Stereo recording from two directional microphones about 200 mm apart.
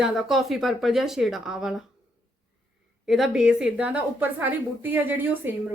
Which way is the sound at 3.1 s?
Centre (ahead or behind).